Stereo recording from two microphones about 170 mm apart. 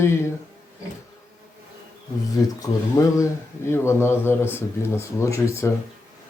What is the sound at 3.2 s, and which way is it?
Speech, 15° left (ahead or behind).